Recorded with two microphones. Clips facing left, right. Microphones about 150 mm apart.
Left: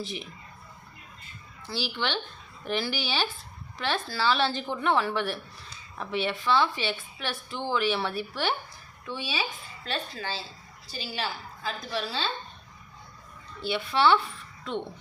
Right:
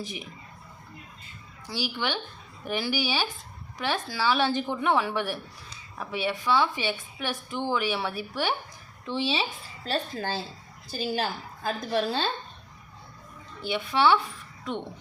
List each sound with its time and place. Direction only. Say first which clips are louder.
0.0 s a woman's voice: left 1 dB; 15° right (ahead or behind)
1.6 s a woman's voice: right 1 dB; 10° right (ahead or behind)
9.0 s a woman's voice: right 5 dB; 25° right (ahead or behind); by 12.3 s 50° right (ahead or behind)
13.6 s a woman's voice: even; 15° right (ahead or behind)